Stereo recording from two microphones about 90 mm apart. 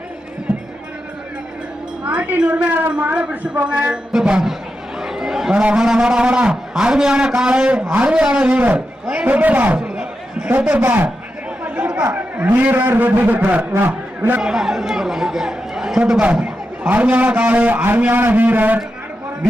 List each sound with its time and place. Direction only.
2.0 s speech: 15° right (ahead or behind)
9.7 s a sound: 10° right (ahead or behind)
10.6 s speech: 15° right (ahead or behind)
11.6 s chatter: 15° right (ahead or behind)
12.9 s a man's voice: 20° right (ahead or behind)
14.4 s speech: 5° right (ahead or behind)